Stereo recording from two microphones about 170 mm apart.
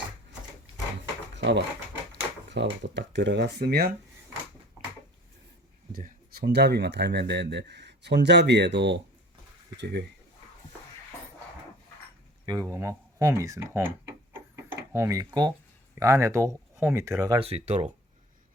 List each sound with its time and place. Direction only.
1.4 s speech: 90° right; by 3.9 s 65° right (ahead or behind)
5.9 s speech: 55° right (ahead or behind); by 10.0 s 80° right
12.5 s speech: 20° right (ahead or behind)
14.5 s a sound: 15° right (ahead or behind)
16.0 s speech: 15° right (ahead or behind)
17.4 s speech: 40° right (ahead or behind)